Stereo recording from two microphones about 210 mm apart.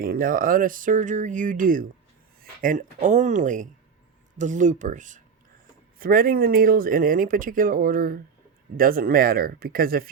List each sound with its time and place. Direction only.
0.0 s speech: 45° right (ahead or behind)